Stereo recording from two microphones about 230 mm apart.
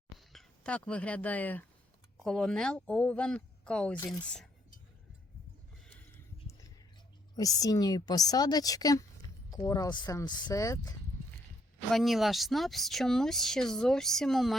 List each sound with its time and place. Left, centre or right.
0.3 s speech: centre
7.3 s a woman's voice: centre
11.9 s speech: centre